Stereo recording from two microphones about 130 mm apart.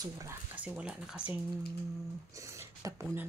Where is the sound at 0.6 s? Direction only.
10° right (ahead or behind).